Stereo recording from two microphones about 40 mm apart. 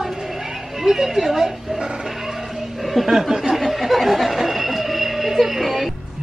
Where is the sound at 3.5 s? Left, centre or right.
Centre.